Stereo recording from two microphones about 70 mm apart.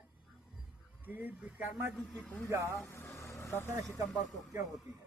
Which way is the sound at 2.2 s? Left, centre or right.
Left.